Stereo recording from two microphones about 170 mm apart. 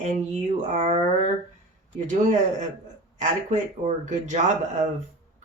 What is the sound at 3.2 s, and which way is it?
Speech, 45° right (ahead or behind).